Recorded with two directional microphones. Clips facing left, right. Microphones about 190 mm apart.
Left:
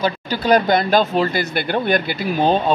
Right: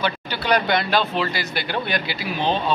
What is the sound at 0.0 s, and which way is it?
Speech, 40° left (ahead or behind).